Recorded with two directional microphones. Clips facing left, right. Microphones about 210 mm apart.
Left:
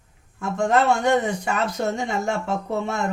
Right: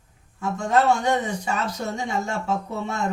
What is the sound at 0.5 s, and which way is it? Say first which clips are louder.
A man's voice: left 1 dB; 55° left (ahead or behind).